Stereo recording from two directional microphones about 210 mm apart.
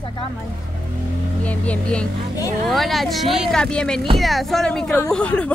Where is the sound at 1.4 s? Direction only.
5° left (ahead or behind).